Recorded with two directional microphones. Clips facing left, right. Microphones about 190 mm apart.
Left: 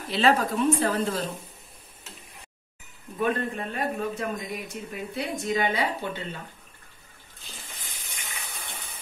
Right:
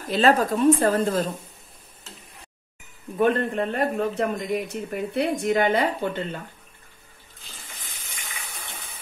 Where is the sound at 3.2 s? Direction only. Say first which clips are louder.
Right 6 dB; 60° right (ahead or behind).